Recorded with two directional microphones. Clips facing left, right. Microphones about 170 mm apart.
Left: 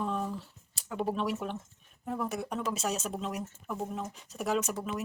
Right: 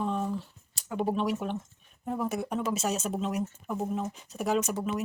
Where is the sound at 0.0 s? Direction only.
Centre (ahead or behind).